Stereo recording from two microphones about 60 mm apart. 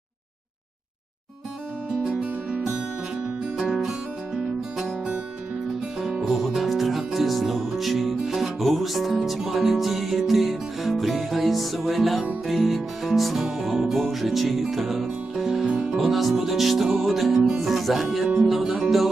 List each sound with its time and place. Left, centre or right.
2.0 s music: centre
3.6 s music: centre
6.0 s music: centre
16.0 s music: centre